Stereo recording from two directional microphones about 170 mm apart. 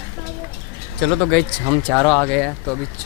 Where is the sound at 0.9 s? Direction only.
5° left (ahead or behind).